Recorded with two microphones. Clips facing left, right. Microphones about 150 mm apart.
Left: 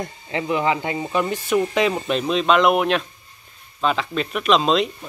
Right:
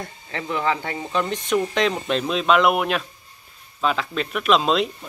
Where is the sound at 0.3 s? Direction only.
15° left (ahead or behind).